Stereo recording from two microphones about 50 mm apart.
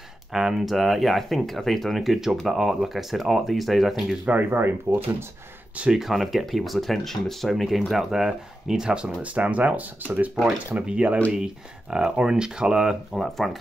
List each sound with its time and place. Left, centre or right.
0.3 s speech: centre
4.3 s speech: right
5.9 s speech: centre
9.2 s speech: right
11.3 s speech: centre
13.1 s speech: centre